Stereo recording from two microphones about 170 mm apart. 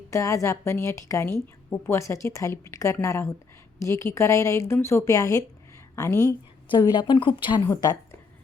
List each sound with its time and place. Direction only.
0.1 s a woman's voice: 20° left (ahead or behind)